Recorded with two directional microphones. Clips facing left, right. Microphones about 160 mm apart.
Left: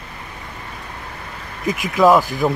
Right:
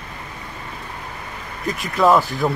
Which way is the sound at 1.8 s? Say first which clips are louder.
Left 2 dB; 5° left (ahead or behind).